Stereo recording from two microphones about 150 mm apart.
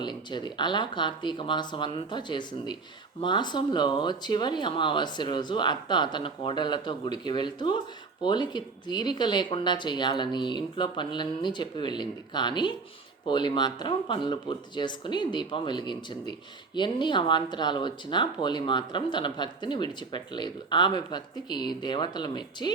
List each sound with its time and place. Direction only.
0.0 s speech: 30° left (ahead or behind)